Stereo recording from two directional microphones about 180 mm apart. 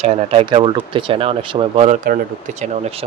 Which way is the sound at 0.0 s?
35° right (ahead or behind).